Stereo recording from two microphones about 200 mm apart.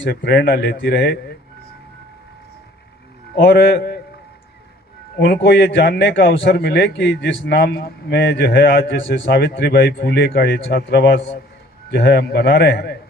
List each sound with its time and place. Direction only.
0.0 s a man's voice: 55° left (ahead or behind)
3.3 s a man's voice: 60° left (ahead or behind)
5.2 s a man's voice: 55° left (ahead or behind)